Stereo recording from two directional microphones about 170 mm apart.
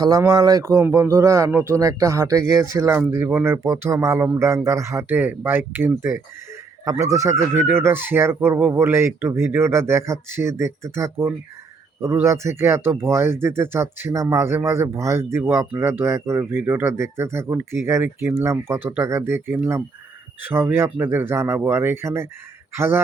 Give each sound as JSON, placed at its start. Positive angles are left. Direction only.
{"t": 0.0, "sound": "speech", "side_deg": -20}